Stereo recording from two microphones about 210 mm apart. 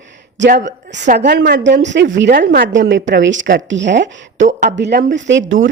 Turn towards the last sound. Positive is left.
turn(degrees=-60)  # may be behind; listen again after turning